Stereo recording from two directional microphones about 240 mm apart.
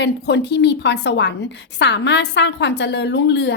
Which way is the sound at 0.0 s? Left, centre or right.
Left.